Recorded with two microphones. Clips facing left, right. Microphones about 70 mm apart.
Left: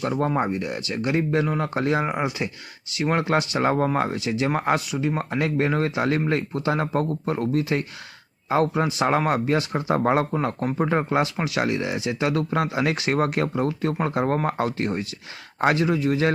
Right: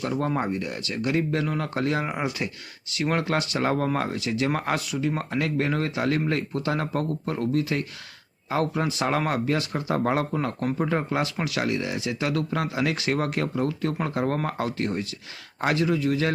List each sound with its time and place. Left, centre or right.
0.3 s speech: centre
2.1 s speech: centre; by 10.2 s left
10.3 s speech: centre